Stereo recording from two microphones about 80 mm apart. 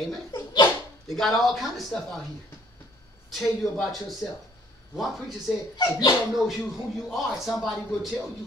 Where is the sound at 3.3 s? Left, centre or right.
Centre.